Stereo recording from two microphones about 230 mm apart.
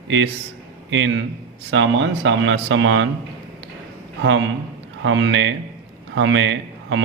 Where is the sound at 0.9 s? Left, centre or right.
Right.